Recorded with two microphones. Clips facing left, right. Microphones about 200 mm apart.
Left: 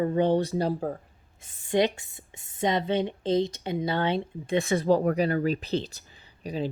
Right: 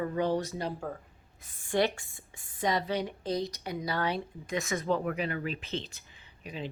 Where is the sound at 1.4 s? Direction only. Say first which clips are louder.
Left 4 dB; 20° left (ahead or behind); by 6.6 s 35° left (ahead or behind).